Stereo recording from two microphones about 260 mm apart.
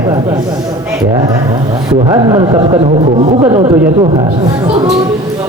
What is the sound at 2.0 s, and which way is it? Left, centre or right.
A man's voice, centre.